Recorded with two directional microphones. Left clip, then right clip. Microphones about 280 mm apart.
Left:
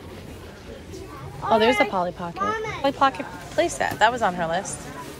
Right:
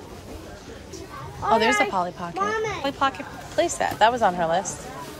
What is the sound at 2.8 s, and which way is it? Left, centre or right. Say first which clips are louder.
A woman's voice: left 3 dB; centre.